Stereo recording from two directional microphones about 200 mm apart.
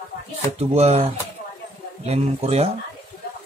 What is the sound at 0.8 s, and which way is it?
Speech, 30° right (ahead or behind).